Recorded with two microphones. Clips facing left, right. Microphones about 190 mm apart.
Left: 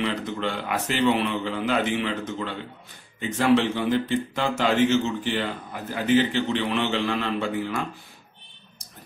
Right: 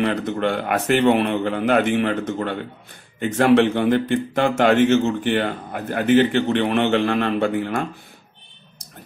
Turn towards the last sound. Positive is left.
turn(degrees=-60)  # may be behind; listen again after turning